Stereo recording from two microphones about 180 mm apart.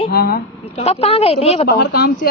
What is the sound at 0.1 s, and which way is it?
Speech, 60° left (ahead or behind).